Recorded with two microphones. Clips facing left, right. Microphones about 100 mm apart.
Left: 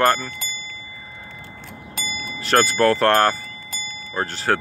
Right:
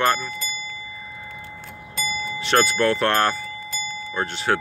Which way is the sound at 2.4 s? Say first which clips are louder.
Left 2 dB; 40° left (ahead or behind).